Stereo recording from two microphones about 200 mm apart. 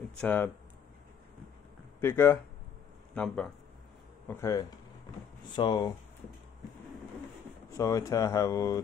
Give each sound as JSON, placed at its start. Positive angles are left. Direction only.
{"t": 0.2, "sound": "speech", "side_deg": 10}
{"t": 2.0, "sound": "speech", "side_deg": 10}
{"t": 4.3, "sound": "speech", "side_deg": 15}
{"t": 7.7, "sound": "speech", "side_deg": 15}